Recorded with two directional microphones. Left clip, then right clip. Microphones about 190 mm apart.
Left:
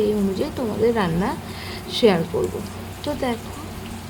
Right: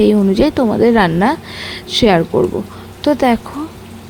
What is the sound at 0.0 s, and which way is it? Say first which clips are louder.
Speech: right 10 dB; 45° right (ahead or behind).